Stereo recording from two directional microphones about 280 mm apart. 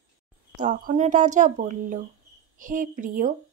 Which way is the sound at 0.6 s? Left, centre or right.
Right.